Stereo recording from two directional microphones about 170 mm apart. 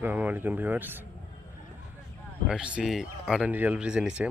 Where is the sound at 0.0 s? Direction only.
10° right (ahead or behind).